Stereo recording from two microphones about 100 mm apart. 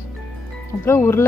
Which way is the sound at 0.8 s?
25° left (ahead or behind).